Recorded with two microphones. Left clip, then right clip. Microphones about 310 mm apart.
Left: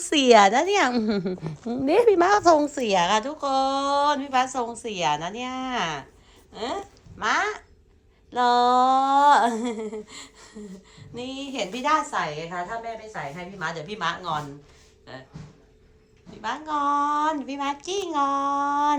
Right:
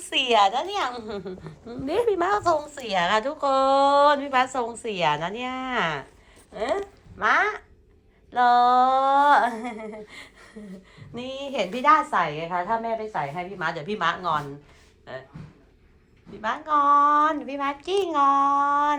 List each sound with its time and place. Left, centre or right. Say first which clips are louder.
0.1 s a woman's voice: left 5 dB; left
0.3 s a woman's voice: left 2 dB; left
1.0 s a woman's voice: left 6 dB; left
2.4 s a woman's voice: left 5 dB; left; by 15.2 s centre
16.4 s a child's voice: right 4 dB; centre